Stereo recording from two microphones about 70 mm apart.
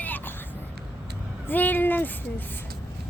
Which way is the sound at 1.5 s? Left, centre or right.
Left.